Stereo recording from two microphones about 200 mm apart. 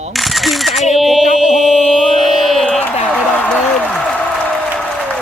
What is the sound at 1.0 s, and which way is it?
Speech, centre (ahead or behind).